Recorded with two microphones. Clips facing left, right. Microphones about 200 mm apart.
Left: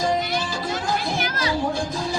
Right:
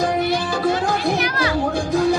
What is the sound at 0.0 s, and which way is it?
Music, 60° right (ahead or behind).